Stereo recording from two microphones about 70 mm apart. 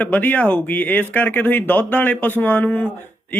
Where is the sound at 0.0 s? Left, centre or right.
Left.